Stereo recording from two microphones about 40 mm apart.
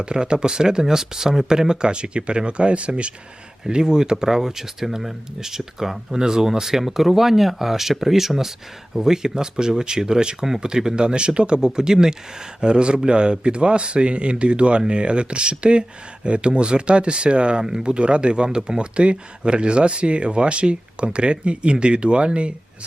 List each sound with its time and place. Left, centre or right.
0.0 s speech: right
3.6 s speech: centre